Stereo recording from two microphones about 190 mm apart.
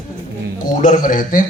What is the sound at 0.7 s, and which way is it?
Speech, 45° left (ahead or behind).